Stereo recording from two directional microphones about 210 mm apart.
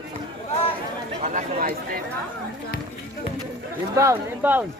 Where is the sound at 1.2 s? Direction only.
40° right (ahead or behind).